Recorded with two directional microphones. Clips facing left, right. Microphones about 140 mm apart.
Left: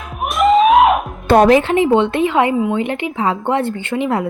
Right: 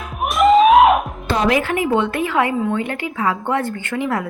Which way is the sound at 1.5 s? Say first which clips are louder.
Left 6 dB; 25° left (ahead or behind).